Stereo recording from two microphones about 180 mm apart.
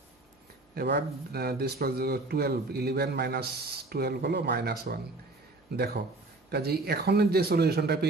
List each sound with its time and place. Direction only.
0.7 s a man's voice: 65° right (ahead or behind)